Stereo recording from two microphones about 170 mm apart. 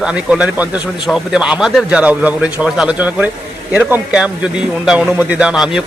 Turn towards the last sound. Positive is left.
turn(degrees=-5)  # may be behind; listen again after turning